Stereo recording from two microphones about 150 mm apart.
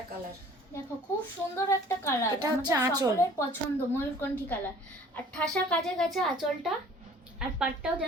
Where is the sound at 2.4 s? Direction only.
25° right (ahead or behind).